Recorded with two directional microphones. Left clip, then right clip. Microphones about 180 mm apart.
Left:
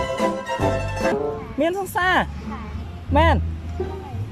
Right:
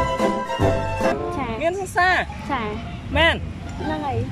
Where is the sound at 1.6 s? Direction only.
45° left (ahead or behind).